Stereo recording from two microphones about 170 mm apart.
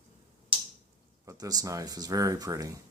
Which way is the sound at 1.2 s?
20° right (ahead or behind).